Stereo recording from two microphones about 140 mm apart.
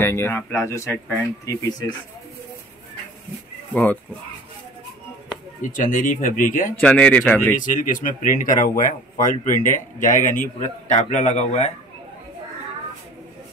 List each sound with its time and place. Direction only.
0.0 s speech: 15° left (ahead or behind)
5.7 s speech: 70° left (ahead or behind)
6.8 s speech: 10° left (ahead or behind)
7.5 s a man's voice: 70° left (ahead or behind); by 11.7 s 50° left (ahead or behind)